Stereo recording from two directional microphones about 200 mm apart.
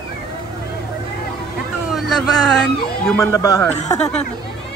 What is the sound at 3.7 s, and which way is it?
Speech, 35° left (ahead or behind).